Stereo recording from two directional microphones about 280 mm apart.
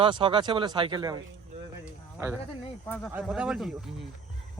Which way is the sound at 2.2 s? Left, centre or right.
Centre.